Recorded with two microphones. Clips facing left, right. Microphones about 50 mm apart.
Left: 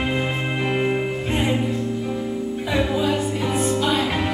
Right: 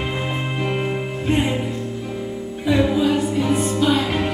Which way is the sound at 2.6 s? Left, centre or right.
Centre.